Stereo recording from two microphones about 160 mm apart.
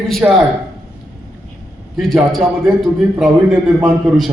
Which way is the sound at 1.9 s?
Centre (ahead or behind).